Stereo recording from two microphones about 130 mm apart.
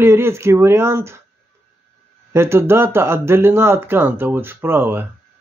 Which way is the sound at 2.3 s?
20° right (ahead or behind).